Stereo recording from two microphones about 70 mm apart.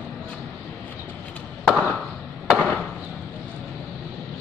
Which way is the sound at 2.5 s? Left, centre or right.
Left.